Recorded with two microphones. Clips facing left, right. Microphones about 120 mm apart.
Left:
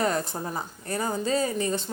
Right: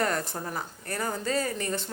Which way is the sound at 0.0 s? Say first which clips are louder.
Left 2 dB; 20° left (ahead or behind).